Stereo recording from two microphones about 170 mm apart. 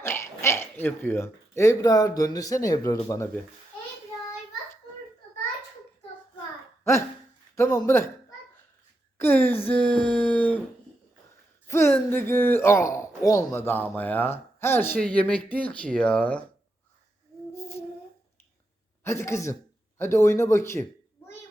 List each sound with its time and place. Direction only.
0.0 s speech: 15° left (ahead or behind)
7.5 s speech: 15° left (ahead or behind)
9.1 s a woman's voice: 10° left (ahead or behind)
11.7 s speech: 15° left (ahead or behind)
17.5 s humming: 15° left (ahead or behind)
19.0 s speech: 15° left (ahead or behind)